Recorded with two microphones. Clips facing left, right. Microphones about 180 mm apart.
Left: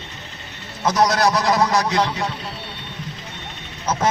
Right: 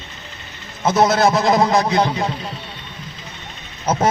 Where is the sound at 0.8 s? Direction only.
25° right (ahead or behind).